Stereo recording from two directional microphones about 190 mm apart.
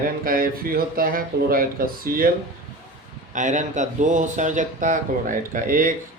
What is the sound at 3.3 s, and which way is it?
Speech, 40° right (ahead or behind).